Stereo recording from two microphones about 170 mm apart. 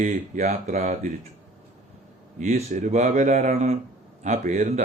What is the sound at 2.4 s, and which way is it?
A man's voice, 45° right (ahead or behind).